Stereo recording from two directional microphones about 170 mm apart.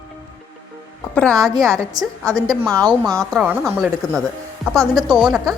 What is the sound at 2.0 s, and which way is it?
A woman's voice, 20° right (ahead or behind).